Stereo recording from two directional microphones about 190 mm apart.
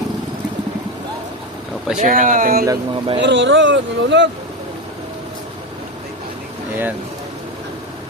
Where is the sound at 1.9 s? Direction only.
45° right (ahead or behind).